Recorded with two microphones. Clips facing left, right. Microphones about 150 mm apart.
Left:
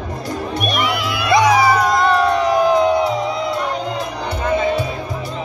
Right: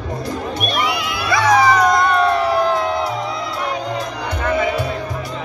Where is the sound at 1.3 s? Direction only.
15° left (ahead or behind).